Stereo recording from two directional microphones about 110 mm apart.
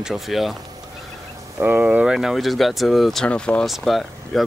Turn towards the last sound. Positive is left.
turn(degrees=0)  # may be behind; listen again after turning